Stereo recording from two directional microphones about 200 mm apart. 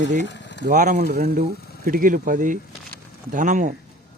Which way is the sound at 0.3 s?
60° left (ahead or behind).